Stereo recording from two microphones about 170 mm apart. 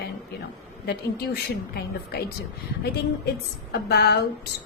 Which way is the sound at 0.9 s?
70° left (ahead or behind).